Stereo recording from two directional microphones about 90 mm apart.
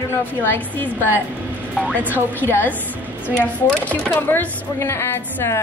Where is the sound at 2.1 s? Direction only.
25° left (ahead or behind).